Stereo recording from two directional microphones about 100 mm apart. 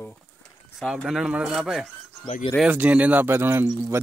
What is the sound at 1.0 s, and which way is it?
Speech, 5° right (ahead or behind).